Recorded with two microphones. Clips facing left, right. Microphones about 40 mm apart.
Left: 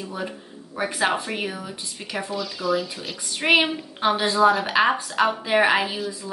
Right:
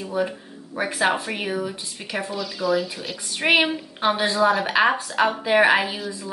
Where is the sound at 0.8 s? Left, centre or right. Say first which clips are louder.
Right 1 dB; centre.